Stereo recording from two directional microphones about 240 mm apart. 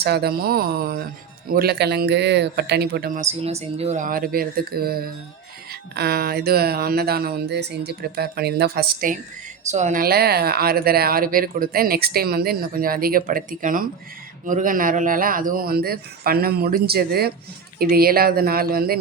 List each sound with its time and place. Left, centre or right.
0.0 s speech: right
3.2 s speech: right